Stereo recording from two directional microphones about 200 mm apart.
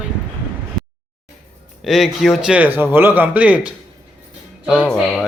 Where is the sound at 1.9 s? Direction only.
Centre (ahead or behind).